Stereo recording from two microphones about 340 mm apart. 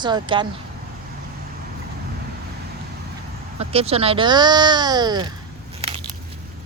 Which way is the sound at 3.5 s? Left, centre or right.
Centre.